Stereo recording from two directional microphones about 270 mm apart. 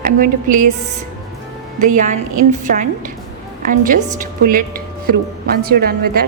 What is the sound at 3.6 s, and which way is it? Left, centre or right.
A woman's voice, right.